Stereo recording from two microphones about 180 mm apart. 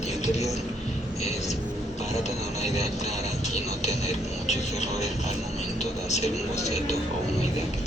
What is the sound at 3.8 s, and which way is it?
Music, 40° left (ahead or behind).